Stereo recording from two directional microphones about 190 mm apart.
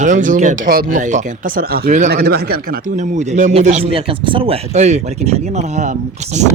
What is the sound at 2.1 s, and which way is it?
A man's voice, 55° right (ahead or behind).